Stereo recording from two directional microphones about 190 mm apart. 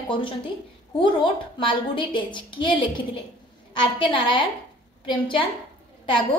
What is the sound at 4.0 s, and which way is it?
Speech, 25° left (ahead or behind).